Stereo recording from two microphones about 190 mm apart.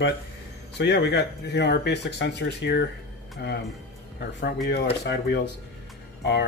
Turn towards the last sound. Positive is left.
turn(degrees=60)  # may be behind; listen again after turning